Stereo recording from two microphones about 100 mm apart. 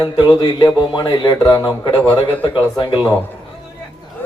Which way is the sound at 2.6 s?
45° left (ahead or behind).